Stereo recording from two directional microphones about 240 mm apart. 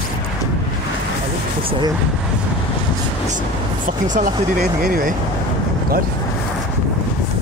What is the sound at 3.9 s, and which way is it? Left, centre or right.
Speech, right.